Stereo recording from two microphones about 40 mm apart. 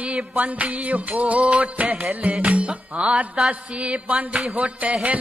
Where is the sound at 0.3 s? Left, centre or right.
Right.